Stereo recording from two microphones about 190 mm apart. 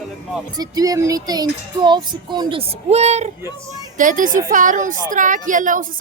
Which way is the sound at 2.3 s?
25° right (ahead or behind).